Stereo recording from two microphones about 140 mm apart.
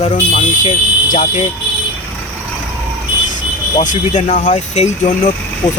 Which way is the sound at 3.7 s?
65° left (ahead or behind).